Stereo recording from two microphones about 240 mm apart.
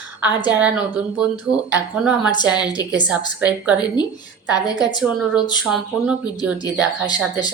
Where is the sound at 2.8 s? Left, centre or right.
Centre.